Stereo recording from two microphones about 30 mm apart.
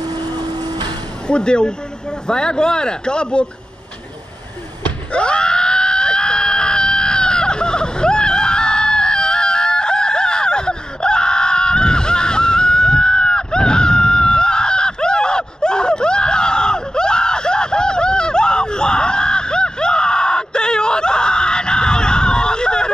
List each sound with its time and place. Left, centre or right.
1.2 s speech: left
5.1 s screaming: left